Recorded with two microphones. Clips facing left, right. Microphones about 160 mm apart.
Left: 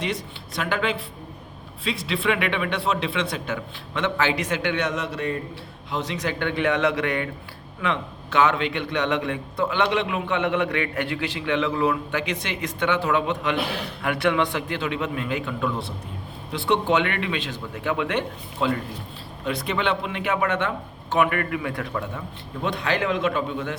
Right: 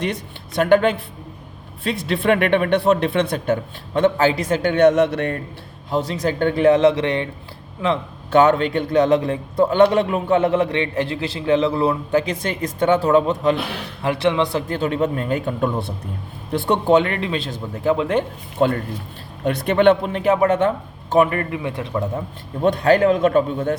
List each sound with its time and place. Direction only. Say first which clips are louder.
0.0 s speech: right 4 dB; 55° right (ahead or behind)
5.9 s a man's voice: right 6 dB; 40° right (ahead or behind)
8.4 s a man's voice: right 6 dB; 45° right (ahead or behind); by 14.6 s 25° right (ahead or behind)
14.7 s a man's voice: right 6 dB; 40° right (ahead or behind)
18.6 s a man's voice: right 6 dB; 45° right (ahead or behind); by 22.2 s 30° right (ahead or behind)
22.6 s speech: right 10 dB; 45° right (ahead or behind)